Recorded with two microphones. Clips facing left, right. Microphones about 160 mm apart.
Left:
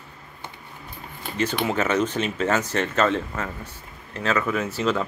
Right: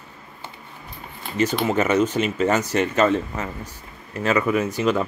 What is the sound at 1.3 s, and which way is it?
Speech, 10° right (ahead or behind).